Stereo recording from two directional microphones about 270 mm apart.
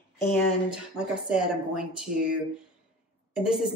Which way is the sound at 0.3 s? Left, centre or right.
Centre.